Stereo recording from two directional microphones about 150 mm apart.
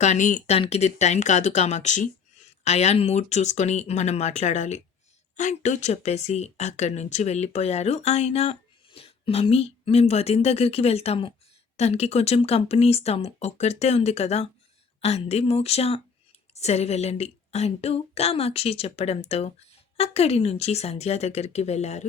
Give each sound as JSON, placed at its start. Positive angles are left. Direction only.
{"t": 0.0, "sound": "speech", "side_deg": 55}